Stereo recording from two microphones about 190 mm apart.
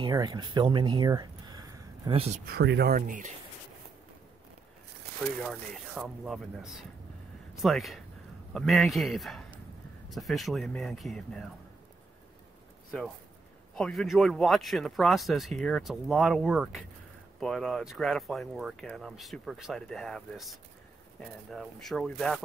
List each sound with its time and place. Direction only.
0.0 s speech: 20° right (ahead or behind)
2.4 s speech: 60° right (ahead or behind)
5.4 s speech: centre (ahead or behind)
13.7 s speech: centre (ahead or behind)